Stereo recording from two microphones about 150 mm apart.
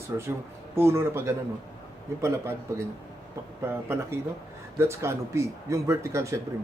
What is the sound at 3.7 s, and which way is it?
Speech, 15° right (ahead or behind).